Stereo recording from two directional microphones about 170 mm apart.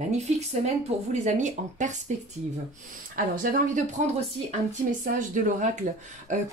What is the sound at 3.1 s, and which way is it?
Speech, 55° right (ahead or behind).